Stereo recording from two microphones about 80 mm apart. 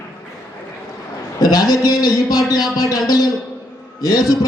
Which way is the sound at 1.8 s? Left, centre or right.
Left.